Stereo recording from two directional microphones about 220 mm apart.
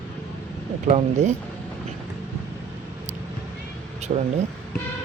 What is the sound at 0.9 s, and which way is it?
Speech, 30° right (ahead or behind).